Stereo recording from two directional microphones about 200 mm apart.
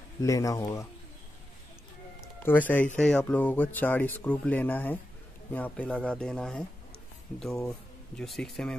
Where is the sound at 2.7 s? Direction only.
10° left (ahead or behind).